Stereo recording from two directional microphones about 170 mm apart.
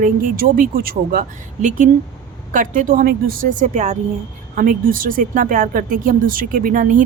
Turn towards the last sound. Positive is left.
turn(degrees=-50)  # may be behind; listen again after turning